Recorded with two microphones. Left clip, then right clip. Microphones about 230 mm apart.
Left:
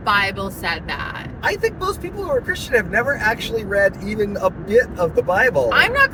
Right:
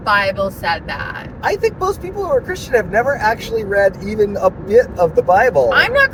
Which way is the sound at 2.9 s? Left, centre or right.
Centre.